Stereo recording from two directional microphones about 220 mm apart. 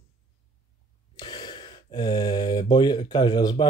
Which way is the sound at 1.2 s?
20° left (ahead or behind).